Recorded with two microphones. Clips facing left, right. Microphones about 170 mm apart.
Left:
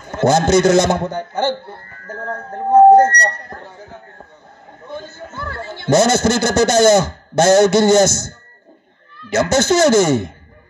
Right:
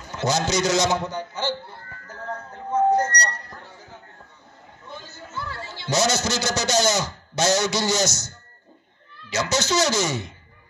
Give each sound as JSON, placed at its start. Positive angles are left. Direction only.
{"t": 0.1, "sound": "a man's voice", "side_deg": 55}
{"t": 4.8, "sound": "a man's voice", "side_deg": 55}